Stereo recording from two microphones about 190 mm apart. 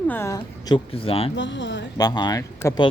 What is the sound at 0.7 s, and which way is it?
Speech, 30° left (ahead or behind).